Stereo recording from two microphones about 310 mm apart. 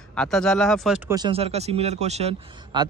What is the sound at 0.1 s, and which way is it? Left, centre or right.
Speech, centre.